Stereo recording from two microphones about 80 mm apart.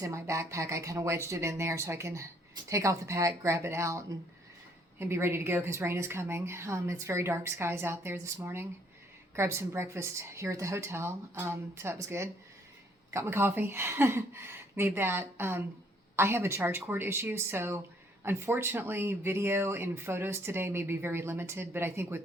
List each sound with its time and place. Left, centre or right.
0.0 s speech: right
9.3 s a woman's voice: right